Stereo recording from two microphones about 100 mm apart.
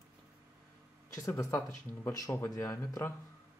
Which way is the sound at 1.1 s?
30° left (ahead or behind).